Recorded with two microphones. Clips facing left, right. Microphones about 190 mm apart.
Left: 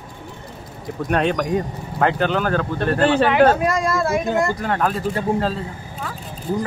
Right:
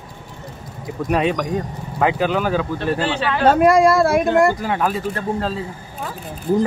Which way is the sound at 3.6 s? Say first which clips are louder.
Right 7 dB; 55° right (ahead or behind).